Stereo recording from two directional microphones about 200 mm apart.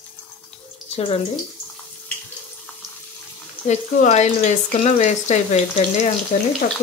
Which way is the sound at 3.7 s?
35° left (ahead or behind).